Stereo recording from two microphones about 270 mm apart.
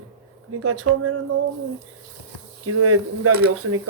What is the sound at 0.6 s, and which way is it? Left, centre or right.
Speech, right.